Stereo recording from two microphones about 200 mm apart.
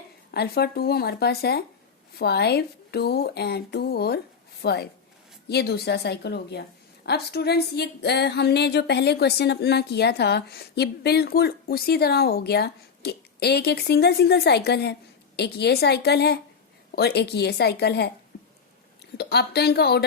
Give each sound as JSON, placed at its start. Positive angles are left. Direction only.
{"t": 0.3, "sound": "a woman's voice", "side_deg": 50}
{"t": 19.1, "sound": "speech", "side_deg": 55}